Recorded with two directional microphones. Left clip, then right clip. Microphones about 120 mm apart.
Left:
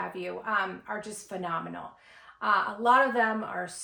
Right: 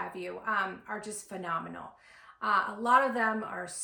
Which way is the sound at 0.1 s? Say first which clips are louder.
Left 2 dB; 20° left (ahead or behind).